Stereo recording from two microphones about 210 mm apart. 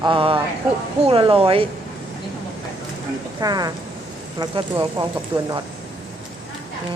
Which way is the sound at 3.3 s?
20° right (ahead or behind).